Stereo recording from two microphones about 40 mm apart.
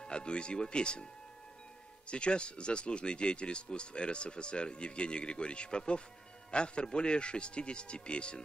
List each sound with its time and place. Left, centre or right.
0.0 s speech: left
2.0 s speech: left